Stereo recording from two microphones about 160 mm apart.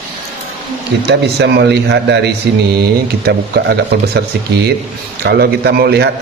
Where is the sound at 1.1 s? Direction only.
90° right.